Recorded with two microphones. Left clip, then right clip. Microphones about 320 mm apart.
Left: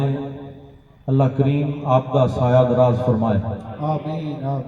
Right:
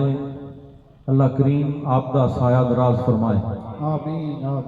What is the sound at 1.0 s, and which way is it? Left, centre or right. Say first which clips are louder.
A man's voice: even; centre.